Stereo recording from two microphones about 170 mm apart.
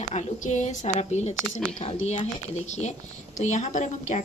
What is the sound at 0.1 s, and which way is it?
A woman's voice, 40° left (ahead or behind).